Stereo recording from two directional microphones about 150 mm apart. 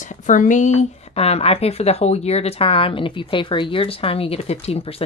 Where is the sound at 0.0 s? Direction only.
60° left (ahead or behind).